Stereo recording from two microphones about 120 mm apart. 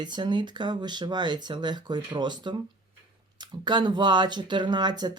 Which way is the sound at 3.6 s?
35° right (ahead or behind).